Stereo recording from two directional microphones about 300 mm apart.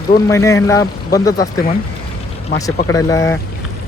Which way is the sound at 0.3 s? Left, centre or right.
Centre.